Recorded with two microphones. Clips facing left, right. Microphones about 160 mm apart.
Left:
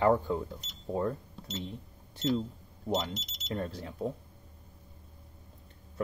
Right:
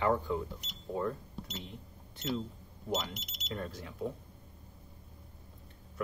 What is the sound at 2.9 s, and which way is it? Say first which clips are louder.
Speech: left 4 dB; 30° left (ahead or behind).